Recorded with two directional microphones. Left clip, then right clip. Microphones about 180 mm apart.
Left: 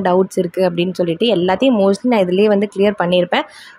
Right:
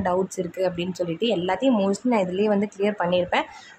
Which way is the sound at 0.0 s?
30° left (ahead or behind).